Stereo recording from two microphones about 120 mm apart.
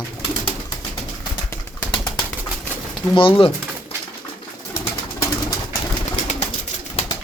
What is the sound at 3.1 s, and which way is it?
Speech, 50° left (ahead or behind).